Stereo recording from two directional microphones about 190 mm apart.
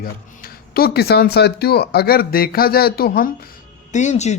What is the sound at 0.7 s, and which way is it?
Speech, 55° left (ahead or behind).